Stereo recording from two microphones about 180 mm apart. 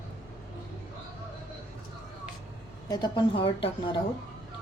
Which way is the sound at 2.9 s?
25° left (ahead or behind).